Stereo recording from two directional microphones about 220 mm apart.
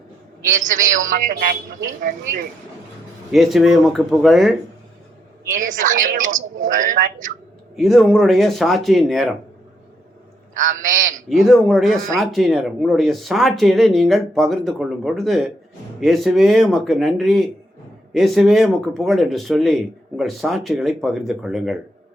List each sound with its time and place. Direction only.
0.4 s a man's voice: 35° right (ahead or behind)
3.3 s speech: centre (ahead or behind)
5.5 s a man's voice: 35° right (ahead or behind)
7.8 s speech: centre (ahead or behind)
10.5 s a man's voice: 35° right (ahead or behind)
11.3 s speech: centre (ahead or behind)